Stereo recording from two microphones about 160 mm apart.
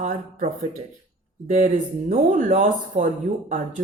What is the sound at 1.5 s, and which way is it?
Speech, 50° right (ahead or behind).